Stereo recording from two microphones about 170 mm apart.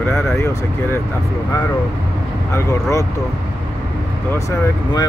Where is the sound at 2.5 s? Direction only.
15° left (ahead or behind).